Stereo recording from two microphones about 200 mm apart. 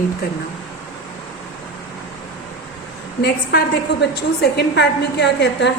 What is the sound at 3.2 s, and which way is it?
A woman's voice, 50° left (ahead or behind).